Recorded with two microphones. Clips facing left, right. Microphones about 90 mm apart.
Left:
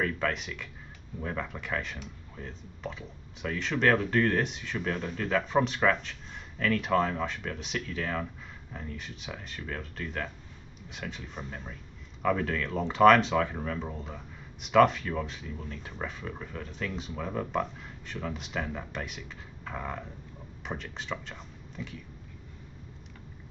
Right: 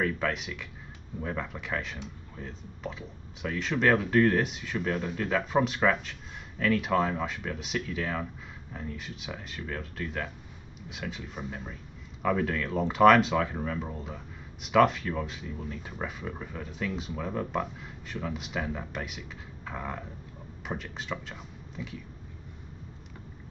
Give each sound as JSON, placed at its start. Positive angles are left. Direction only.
{"t": 0.0, "sound": "speech", "side_deg": 0}